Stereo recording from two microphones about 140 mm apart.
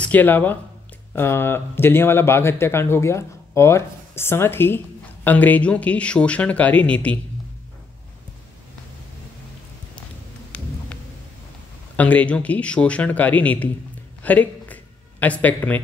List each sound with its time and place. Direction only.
0.0 s speech: 10° left (ahead or behind)
10.5 s thunder: 10° left (ahead or behind)
12.0 s speech: 10° left (ahead or behind)
14.2 s a sound: 10° left (ahead or behind)